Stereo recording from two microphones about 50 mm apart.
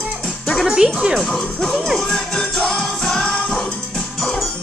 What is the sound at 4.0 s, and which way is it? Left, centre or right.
Music, centre.